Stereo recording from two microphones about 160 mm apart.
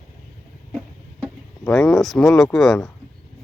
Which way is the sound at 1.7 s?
Centre (ahead or behind).